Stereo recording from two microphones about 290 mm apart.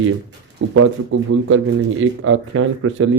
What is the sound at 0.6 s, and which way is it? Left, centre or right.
A man's voice, right.